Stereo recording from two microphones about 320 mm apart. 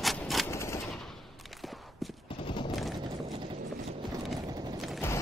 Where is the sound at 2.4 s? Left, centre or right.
Centre.